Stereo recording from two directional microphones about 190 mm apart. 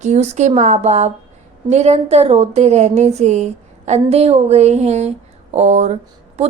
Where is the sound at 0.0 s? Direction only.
40° right (ahead or behind).